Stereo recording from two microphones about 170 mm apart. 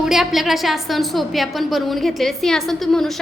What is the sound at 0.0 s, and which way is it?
A woman's voice, centre (ahead or behind).